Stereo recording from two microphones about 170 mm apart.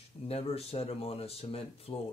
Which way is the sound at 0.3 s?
35° left (ahead or behind).